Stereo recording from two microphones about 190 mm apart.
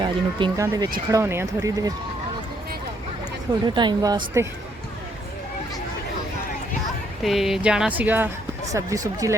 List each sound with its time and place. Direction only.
0.0 s speech: 25° right (ahead or behind)
3.6 s speech: 25° right (ahead or behind)
7.2 s speech: centre (ahead or behind); by 9.3 s 15° right (ahead or behind)